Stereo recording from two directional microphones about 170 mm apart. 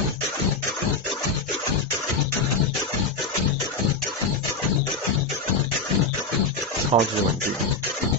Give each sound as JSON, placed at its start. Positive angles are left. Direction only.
{"t": 6.9, "sound": "speech", "side_deg": -40}